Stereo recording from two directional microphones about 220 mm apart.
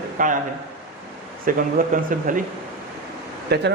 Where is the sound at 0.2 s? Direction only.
35° right (ahead or behind).